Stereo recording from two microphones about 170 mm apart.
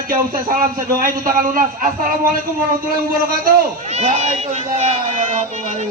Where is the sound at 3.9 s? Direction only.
40° right (ahead or behind).